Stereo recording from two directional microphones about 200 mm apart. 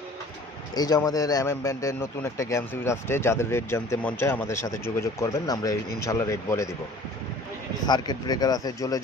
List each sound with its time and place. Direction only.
0.7 s a man's voice: 20° left (ahead or behind)
7.8 s speech: 20° left (ahead or behind)